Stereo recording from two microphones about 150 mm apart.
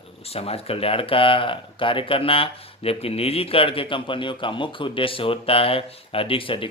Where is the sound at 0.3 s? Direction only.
40° left (ahead or behind).